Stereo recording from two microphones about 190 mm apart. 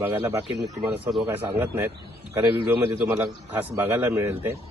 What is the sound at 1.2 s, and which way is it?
Speech, 30° right (ahead or behind).